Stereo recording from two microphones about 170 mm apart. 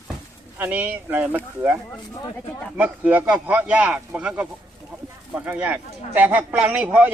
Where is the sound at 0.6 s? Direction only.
10° right (ahead or behind).